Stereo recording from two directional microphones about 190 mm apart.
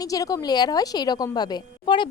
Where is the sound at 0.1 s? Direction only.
20° left (ahead or behind).